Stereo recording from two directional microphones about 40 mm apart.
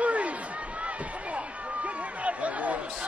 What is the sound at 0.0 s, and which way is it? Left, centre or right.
Run, right.